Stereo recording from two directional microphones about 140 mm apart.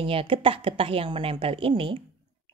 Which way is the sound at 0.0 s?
40° right (ahead or behind).